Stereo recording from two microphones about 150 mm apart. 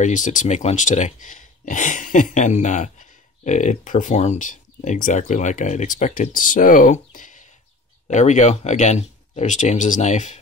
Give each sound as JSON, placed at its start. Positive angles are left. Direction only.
{"t": 0.0, "sound": "speech", "side_deg": 55}